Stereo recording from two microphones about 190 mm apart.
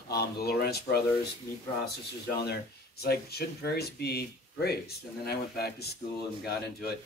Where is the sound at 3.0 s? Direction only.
55° left (ahead or behind).